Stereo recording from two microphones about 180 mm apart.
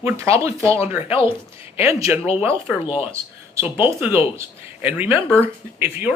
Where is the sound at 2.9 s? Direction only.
10° right (ahead or behind).